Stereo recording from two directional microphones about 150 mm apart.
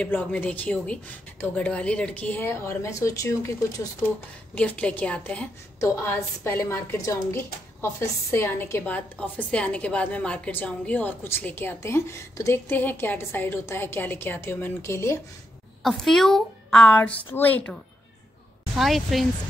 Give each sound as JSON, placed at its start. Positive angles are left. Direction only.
{"t": 0.0, "sound": "a woman's voice", "side_deg": 10}
{"t": 4.6, "sound": "a woman's voice", "side_deg": 10}
{"t": 15.8, "sound": "a woman's voice", "side_deg": 0}
{"t": 18.8, "sound": "a woman's voice", "side_deg": 0}